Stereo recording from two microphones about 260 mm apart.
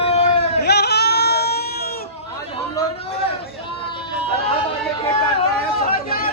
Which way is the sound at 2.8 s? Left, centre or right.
Left.